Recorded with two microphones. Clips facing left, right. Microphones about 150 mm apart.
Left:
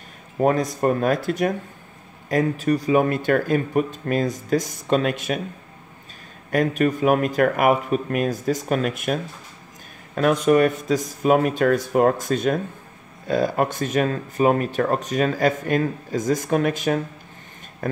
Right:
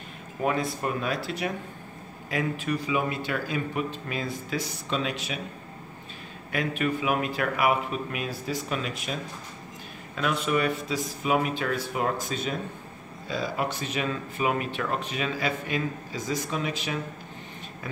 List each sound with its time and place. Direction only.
0.4 s speech: 40° left (ahead or behind)
6.5 s speech: 45° left (ahead or behind)